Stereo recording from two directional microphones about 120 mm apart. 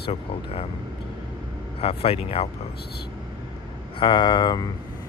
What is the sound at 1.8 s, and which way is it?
Speech, 55° left (ahead or behind).